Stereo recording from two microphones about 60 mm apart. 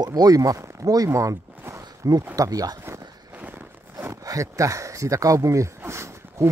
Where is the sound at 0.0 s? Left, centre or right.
Right.